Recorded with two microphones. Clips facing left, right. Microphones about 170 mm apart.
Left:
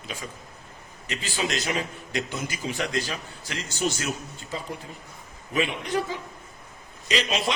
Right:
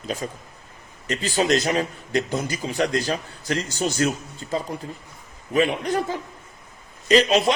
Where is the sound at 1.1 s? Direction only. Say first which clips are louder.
Right 8 dB; 40° right (ahead or behind).